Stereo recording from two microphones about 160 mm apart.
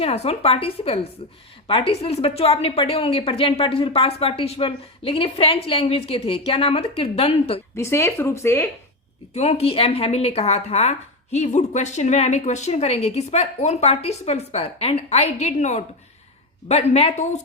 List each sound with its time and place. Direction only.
0.0 s a woman's voice: 40° left (ahead or behind)
7.8 s speech: 15° left (ahead or behind)
9.3 s speech: 40° left (ahead or behind)